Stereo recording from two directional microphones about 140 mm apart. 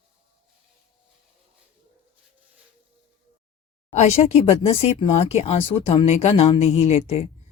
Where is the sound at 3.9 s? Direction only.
50° left (ahead or behind).